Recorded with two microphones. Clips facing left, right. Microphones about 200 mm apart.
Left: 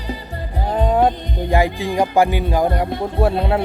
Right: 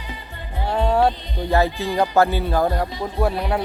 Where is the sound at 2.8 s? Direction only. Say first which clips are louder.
Left 5 dB; 60° left (ahead or behind).